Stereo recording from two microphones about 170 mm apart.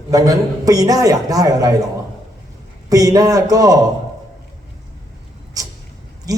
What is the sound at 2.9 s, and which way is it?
Speech, 20° right (ahead or behind).